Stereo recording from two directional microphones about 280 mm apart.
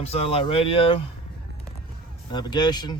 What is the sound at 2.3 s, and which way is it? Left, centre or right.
Speech, centre.